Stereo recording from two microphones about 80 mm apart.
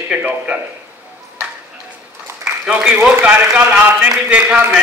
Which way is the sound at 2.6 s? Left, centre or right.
Centre.